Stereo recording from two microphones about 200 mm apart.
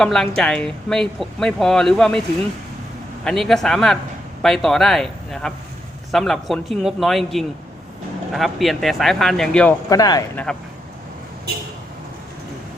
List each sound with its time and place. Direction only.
0.0 s speech: centre (ahead or behind)
3.2 s speech: centre (ahead or behind)
9.9 s speech: 20° left (ahead or behind)